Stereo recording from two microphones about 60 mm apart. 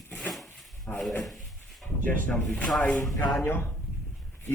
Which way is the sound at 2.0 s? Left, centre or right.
Left.